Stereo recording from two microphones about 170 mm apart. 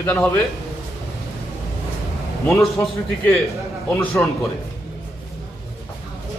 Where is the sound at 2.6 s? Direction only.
5° left (ahead or behind).